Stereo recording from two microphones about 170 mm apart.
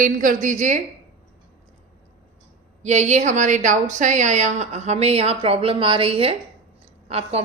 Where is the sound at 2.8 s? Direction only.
45° right (ahead or behind).